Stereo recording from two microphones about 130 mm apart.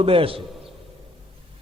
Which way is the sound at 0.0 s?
45° right (ahead or behind).